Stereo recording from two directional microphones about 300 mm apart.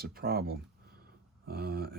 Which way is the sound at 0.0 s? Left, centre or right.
Right.